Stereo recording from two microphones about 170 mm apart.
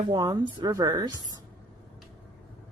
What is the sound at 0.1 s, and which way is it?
Speech, 25° right (ahead or behind).